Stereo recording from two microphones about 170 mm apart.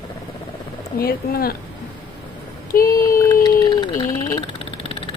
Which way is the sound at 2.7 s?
60° left (ahead or behind).